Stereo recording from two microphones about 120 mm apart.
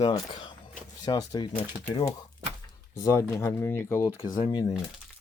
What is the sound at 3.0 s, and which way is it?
Speech, 25° left (ahead or behind).